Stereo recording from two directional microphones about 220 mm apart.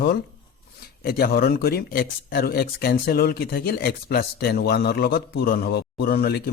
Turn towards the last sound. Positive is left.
turn(degrees=45)  # may be behind; listen again after turning